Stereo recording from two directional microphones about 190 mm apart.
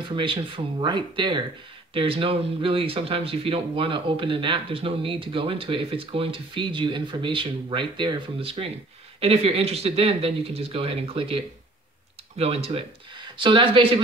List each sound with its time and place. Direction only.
0.1 s speech: 25° right (ahead or behind)